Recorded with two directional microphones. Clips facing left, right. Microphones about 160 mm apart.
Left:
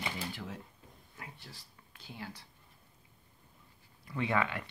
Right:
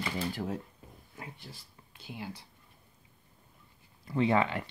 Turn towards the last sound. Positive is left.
turn(degrees=-25)  # may be behind; listen again after turning